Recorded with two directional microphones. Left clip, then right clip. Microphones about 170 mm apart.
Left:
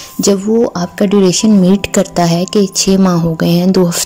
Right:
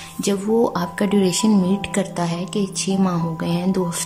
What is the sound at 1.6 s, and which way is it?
Speech, 30° left (ahead or behind).